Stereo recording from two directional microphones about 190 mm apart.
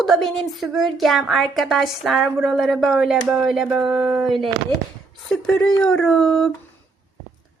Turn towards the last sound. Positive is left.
turn(degrees=0)  # may be behind; listen again after turning